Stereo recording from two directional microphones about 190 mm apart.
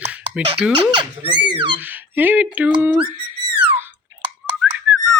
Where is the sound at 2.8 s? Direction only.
10° right (ahead or behind).